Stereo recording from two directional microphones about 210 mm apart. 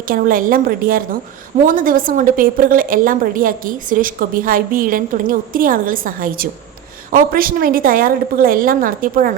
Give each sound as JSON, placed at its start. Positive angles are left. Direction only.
{"t": 0.1, "sound": "a woman's voice", "side_deg": -40}